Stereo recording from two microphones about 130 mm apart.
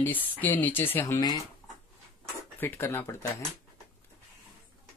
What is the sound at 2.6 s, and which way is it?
Speech, 15° left (ahead or behind).